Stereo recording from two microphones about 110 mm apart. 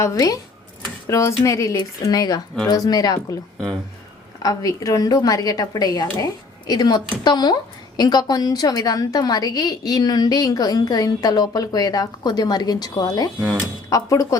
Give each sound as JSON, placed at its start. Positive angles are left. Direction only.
{"t": 0.0, "sound": "a woman's voice", "side_deg": 30}
{"t": 4.4, "sound": "a woman's voice", "side_deg": 30}